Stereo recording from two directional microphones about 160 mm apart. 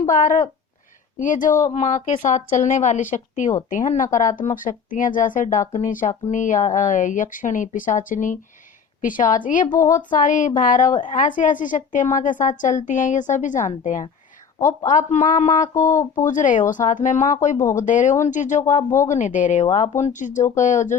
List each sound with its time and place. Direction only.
0.1 s speech: 55° left (ahead or behind)
14.6 s a woman's voice: 15° left (ahead or behind)
14.8 s speech: 50° left (ahead or behind)
18.8 s a woman's voice: 15° left (ahead or behind)
19.0 s speech: 50° left (ahead or behind)